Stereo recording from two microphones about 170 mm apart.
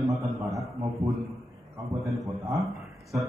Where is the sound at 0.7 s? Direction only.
20° right (ahead or behind).